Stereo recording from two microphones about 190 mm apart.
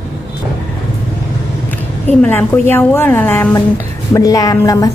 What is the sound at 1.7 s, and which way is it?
A woman's voice, 10° left (ahead or behind).